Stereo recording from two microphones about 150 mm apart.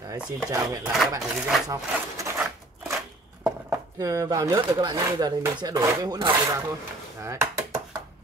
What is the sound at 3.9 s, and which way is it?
Speech, 25° right (ahead or behind).